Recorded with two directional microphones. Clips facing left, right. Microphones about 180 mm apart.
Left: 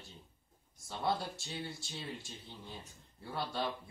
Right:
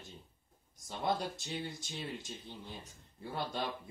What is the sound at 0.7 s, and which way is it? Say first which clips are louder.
Speech: even; 20° right (ahead or behind).